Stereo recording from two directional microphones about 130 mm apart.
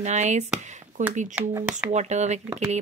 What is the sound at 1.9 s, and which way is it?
Speech, 60° right (ahead or behind).